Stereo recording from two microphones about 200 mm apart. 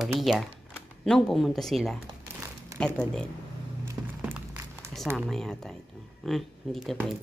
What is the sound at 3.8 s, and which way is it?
Music, 10° right (ahead or behind).